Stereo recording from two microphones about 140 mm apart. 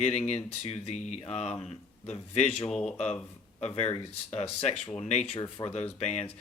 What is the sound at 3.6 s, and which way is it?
Speech, 50° left (ahead or behind).